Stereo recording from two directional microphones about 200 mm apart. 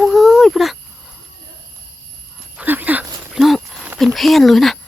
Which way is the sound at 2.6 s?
10° right (ahead or behind).